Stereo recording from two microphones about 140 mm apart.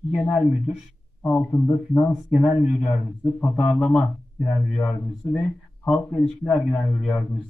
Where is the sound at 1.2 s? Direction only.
10° left (ahead or behind).